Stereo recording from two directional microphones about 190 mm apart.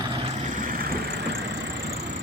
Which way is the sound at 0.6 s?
50° right (ahead or behind).